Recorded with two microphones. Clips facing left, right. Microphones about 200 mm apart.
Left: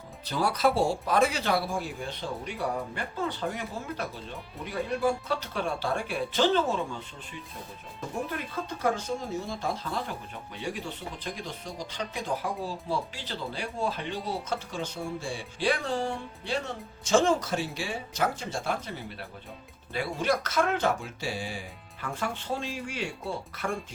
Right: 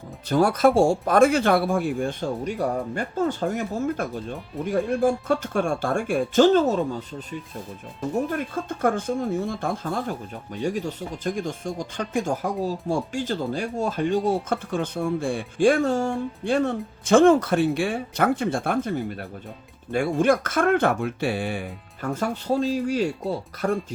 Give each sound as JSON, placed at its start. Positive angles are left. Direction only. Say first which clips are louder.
{"t": 0.3, "sound": "speech", "louder": "right 8 dB", "side_deg": -50}
{"t": 8.3, "sound": "speech", "louder": "right 7 dB", "side_deg": -50}
{"t": 22.0, "sound": "speech", "louder": "right 7 dB", "side_deg": -40}